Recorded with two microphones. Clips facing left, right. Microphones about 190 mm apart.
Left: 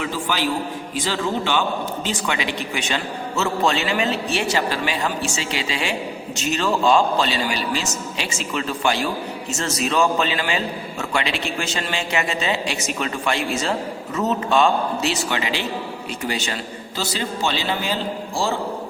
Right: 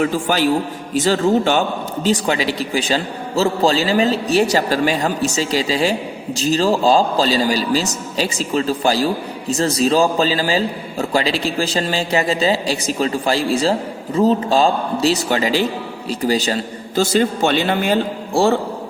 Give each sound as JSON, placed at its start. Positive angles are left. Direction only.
{"t": 0.0, "sound": "a man's voice", "side_deg": -45}